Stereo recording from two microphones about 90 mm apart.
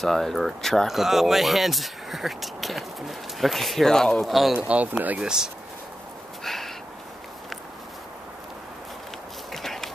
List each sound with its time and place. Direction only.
0.0 s speech: 5° left (ahead or behind)
4.6 s speech: 15° right (ahead or behind)
6.4 s a sound: 5° left (ahead or behind)
9.5 s walk: 5° left (ahead or behind)